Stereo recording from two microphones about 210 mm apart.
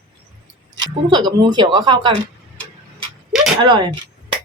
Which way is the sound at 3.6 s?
20° right (ahead or behind).